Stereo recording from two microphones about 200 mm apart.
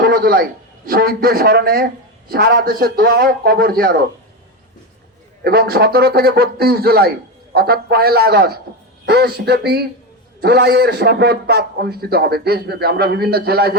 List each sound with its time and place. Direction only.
0.0 s a man's voice: 50° right (ahead or behind)
5.4 s a man's voice: 50° right (ahead or behind)